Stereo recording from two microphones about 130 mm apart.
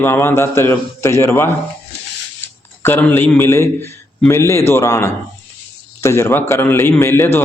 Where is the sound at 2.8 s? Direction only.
15° left (ahead or behind).